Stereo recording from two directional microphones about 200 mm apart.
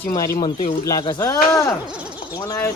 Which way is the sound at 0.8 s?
15° left (ahead or behind).